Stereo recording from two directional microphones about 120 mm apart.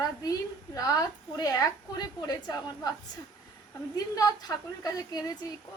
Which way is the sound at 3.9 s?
30° left (ahead or behind).